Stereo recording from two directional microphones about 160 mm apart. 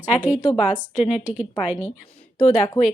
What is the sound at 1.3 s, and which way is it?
Speech, 10° right (ahead or behind).